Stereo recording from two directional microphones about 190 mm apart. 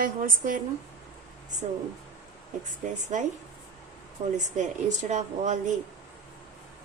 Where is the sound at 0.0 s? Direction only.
45° right (ahead or behind).